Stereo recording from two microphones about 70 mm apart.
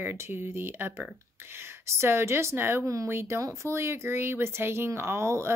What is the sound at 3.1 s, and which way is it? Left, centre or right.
Speech, right.